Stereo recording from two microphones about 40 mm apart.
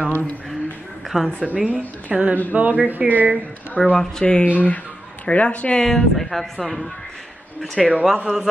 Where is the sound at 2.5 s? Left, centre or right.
Right.